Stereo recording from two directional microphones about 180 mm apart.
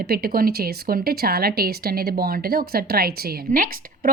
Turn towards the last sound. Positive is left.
turn(degrees=-50)  # may be behind; listen again after turning